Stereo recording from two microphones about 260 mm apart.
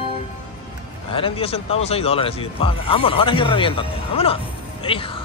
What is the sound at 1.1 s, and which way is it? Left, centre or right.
Speech, left.